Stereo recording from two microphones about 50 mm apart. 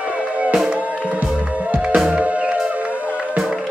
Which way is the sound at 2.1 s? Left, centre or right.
Right.